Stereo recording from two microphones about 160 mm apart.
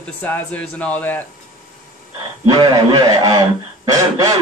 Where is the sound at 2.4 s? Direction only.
25° right (ahead or behind).